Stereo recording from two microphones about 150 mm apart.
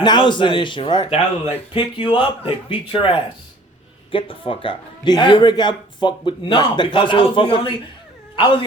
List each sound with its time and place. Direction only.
0.0 s speech: 30° left (ahead or behind)